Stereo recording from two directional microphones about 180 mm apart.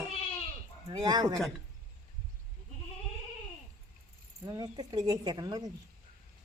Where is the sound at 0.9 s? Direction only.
25° right (ahead or behind).